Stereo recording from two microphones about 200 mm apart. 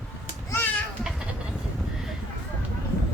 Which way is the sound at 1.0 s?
5° right (ahead or behind).